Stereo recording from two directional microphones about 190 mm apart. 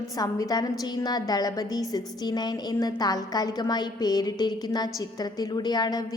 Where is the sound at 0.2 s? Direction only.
20° left (ahead or behind).